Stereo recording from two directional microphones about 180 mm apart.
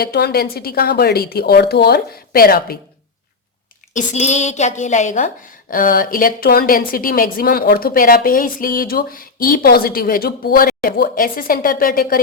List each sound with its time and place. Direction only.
0.0 s a woman's voice: 60° left (ahead or behind)
3.9 s a woman's voice: 40° left (ahead or behind)